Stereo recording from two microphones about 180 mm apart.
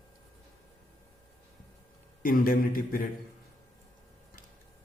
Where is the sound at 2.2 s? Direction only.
50° left (ahead or behind).